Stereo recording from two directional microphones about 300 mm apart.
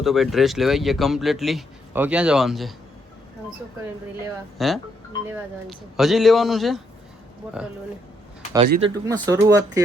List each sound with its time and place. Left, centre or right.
0.0 s speech: centre
4.2 s speech: centre
8.5 s speech: right